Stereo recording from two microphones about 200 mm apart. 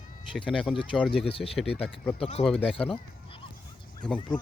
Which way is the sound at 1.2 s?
30° left (ahead or behind).